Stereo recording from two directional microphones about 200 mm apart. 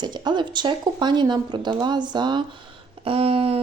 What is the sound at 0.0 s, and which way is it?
Speech, 20° right (ahead or behind).